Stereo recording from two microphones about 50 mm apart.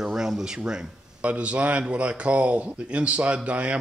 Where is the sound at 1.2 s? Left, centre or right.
Right.